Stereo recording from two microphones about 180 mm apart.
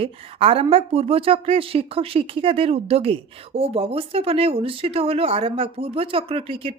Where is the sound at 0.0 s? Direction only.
30° right (ahead or behind).